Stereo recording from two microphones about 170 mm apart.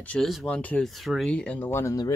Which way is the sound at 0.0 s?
5° left (ahead or behind).